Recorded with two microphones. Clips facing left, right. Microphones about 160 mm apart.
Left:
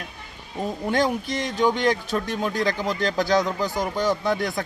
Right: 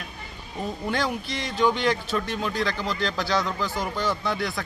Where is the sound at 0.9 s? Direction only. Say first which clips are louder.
Left 5 dB; 45° left (ahead or behind).